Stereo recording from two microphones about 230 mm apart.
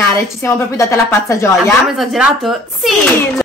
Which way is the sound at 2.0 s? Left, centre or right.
Centre.